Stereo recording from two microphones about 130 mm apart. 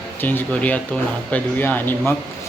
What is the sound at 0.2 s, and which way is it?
Speech, 15° left (ahead or behind).